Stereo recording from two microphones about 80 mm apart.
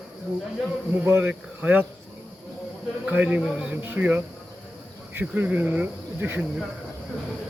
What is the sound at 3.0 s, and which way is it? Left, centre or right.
Speech, centre.